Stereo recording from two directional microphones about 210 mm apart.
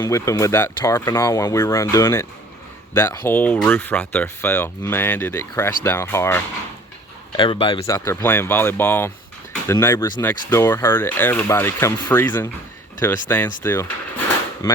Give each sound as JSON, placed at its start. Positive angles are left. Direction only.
{"t": 0.0, "sound": "speech", "side_deg": 15}
{"t": 7.3, "sound": "speech", "side_deg": 25}
{"t": 7.9, "sound": "speech", "side_deg": 15}